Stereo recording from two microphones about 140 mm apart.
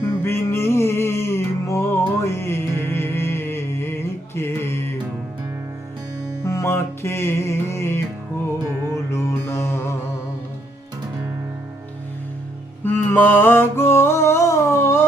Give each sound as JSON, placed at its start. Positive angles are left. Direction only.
{"t": 0.0, "sound": "music", "side_deg": 15}
{"t": 6.4, "sound": "music", "side_deg": 20}
{"t": 9.1, "sound": "mantra", "side_deg": 15}
{"t": 12.8, "sound": "a sound", "side_deg": 15}